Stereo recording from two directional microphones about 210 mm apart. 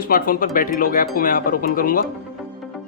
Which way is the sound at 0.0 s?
40° left (ahead or behind).